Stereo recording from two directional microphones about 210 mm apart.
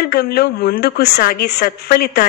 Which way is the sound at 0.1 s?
45° left (ahead or behind).